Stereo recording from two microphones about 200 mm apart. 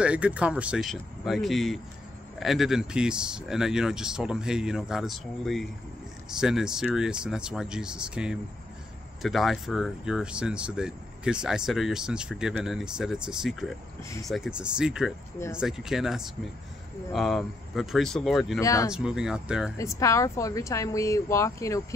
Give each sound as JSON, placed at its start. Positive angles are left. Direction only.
{"t": 0.0, "sound": "speech", "side_deg": -5}
{"t": 14.0, "sound": "speech", "side_deg": 15}
{"t": 14.3, "sound": "speech", "side_deg": -5}
{"t": 18.6, "sound": "speech", "side_deg": 15}
{"t": 18.9, "sound": "speech", "side_deg": -5}
{"t": 19.8, "sound": "speech", "side_deg": 15}